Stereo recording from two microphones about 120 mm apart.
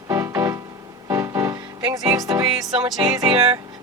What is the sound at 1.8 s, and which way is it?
Music, 30° right (ahead or behind).